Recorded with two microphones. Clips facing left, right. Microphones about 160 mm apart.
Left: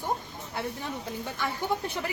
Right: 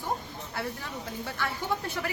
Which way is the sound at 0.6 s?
20° left (ahead or behind).